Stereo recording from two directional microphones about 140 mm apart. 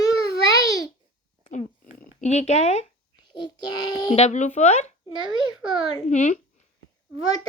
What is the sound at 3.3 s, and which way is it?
Child singing, 30° left (ahead or behind).